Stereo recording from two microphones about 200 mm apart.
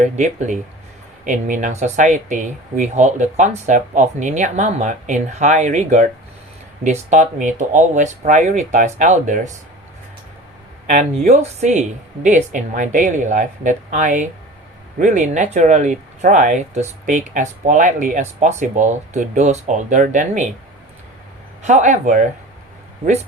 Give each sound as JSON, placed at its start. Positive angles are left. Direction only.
{"t": 0.0, "sound": "speech", "side_deg": -35}
{"t": 10.8, "sound": "speech", "side_deg": -35}
{"t": 21.6, "sound": "speech", "side_deg": -35}